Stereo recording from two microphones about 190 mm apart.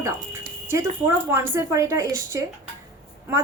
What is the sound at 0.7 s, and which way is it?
A woman's voice, 15° right (ahead or behind).